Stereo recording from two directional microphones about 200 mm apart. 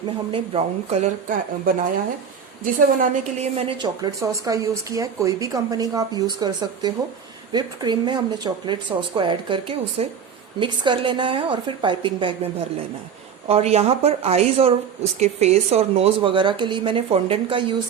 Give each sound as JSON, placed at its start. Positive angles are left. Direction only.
{"t": 0.3, "sound": "a woman's voice", "side_deg": -30}